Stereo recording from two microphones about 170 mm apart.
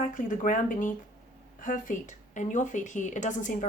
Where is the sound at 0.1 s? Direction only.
50° left (ahead or behind).